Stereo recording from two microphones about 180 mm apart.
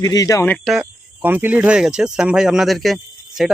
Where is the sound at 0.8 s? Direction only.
10° right (ahead or behind).